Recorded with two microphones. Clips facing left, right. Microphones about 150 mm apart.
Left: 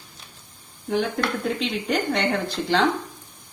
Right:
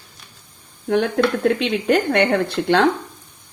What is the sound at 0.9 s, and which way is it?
Speech, 70° right (ahead or behind).